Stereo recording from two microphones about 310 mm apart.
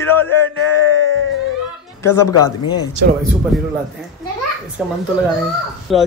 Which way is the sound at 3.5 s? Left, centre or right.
Centre.